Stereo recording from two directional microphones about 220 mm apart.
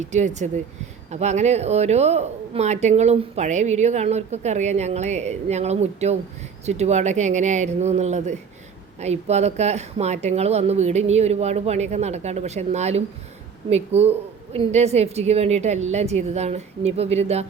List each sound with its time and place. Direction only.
0.0 s a woman's voice: 30° right (ahead or behind)